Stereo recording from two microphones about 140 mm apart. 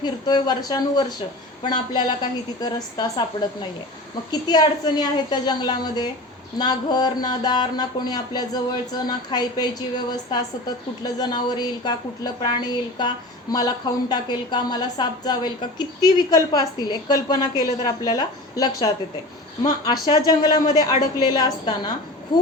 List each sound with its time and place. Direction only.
0.0 s a woman's voice: 30° left (ahead or behind)